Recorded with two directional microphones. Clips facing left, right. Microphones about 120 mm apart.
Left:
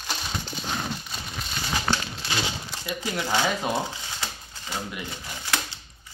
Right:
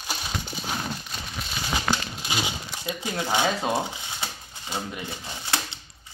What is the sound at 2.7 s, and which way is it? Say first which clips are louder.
Speech: even; 20° right (ahead or behind).